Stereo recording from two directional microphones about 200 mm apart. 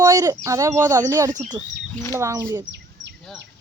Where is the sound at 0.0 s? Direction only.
20° right (ahead or behind).